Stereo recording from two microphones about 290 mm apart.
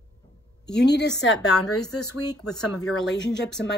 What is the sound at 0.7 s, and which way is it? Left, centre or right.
Speech, left.